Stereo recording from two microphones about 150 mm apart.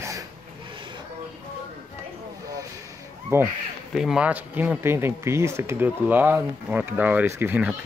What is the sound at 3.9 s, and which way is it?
Speech, 5° right (ahead or behind).